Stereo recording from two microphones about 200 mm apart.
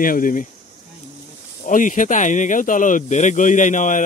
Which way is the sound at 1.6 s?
40° left (ahead or behind).